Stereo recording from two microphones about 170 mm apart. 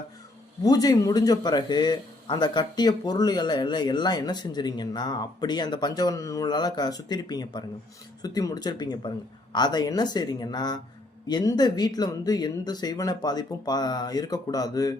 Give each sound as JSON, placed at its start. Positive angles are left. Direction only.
{"t": 0.6, "sound": "speech", "side_deg": 20}